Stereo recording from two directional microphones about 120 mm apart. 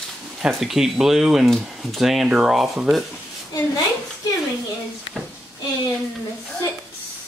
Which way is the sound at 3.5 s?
30° left (ahead or behind).